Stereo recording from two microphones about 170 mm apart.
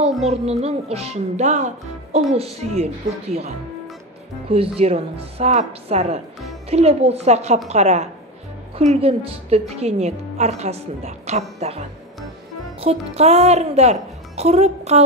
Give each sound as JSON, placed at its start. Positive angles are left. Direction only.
{"t": 0.2, "sound": "a woman's voice", "side_deg": -40}
{"t": 12.8, "sound": "a woman's voice", "side_deg": -40}